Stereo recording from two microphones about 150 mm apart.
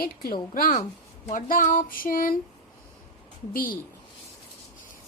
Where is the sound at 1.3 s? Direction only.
60° left (ahead or behind).